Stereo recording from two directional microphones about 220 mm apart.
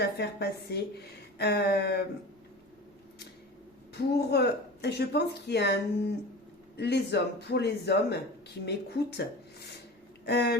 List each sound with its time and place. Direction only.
0.0 s speech: 50° left (ahead or behind)
3.9 s speech: 50° left (ahead or behind)